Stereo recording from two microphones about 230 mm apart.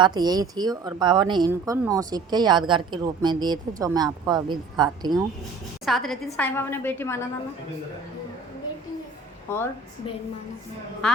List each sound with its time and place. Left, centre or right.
0.0 s speech: centre
5.8 s a woman's voice: centre
9.5 s a woman's voice: centre
11.0 s a woman's voice: centre